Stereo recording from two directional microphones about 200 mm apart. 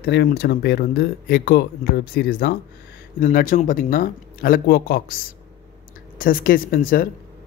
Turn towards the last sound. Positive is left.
turn(degrees=45)  # may be behind; listen again after turning